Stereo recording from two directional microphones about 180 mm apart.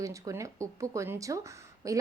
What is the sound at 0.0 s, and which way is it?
Speech, 20° right (ahead or behind).